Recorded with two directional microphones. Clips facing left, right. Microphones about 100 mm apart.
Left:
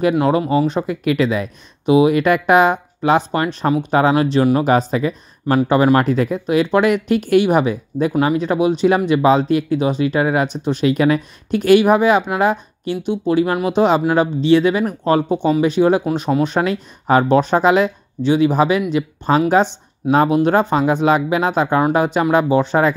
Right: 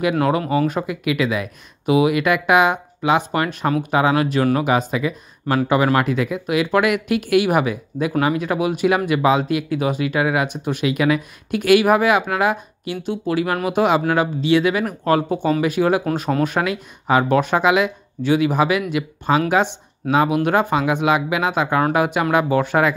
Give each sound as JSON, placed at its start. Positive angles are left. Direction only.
{"t": 0.2, "sound": "speech", "side_deg": 25}
{"t": 0.8, "sound": "speech", "side_deg": 35}
{"t": 16.5, "sound": "speech", "side_deg": 35}